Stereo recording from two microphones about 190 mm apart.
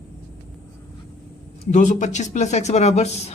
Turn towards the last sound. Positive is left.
turn(degrees=35)  # may be behind; listen again after turning